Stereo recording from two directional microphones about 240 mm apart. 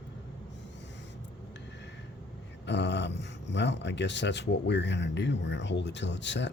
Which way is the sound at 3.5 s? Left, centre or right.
Left.